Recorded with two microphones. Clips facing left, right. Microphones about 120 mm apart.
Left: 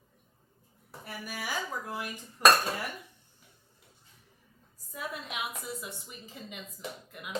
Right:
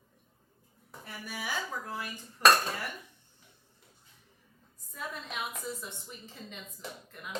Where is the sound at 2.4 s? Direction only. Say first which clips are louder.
Left 1 dB; 20° left (ahead or behind).